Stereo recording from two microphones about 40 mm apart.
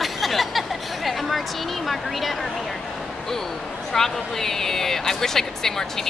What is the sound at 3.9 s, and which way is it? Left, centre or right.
Speech, centre.